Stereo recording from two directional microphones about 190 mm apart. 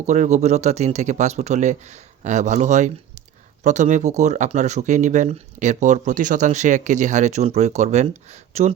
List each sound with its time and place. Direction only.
0.0 s speech: 40° right (ahead or behind)